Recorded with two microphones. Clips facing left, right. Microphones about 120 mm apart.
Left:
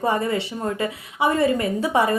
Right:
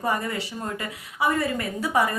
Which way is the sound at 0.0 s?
25° left (ahead or behind).